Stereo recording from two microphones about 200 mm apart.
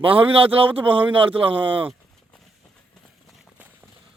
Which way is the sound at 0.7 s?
10° right (ahead or behind).